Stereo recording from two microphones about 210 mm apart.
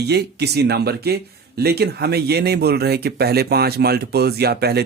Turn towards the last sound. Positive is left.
turn(degrees=-50)  # may be behind; listen again after turning